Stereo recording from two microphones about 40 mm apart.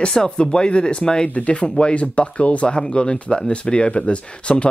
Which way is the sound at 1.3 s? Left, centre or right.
Left.